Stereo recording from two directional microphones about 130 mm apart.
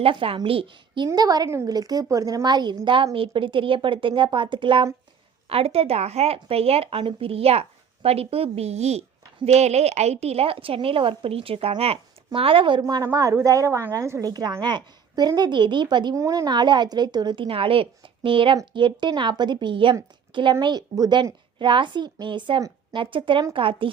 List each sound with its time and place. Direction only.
0.0 s speech: 45° right (ahead or behind)
1.0 s a woman's voice: 30° right (ahead or behind)
12.8 s a woman's voice: 25° right (ahead or behind)
16.1 s a woman's voice: 25° right (ahead or behind); by 23.9 s 40° right (ahead or behind)